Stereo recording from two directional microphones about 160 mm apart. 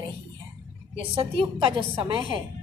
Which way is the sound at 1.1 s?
30° right (ahead or behind).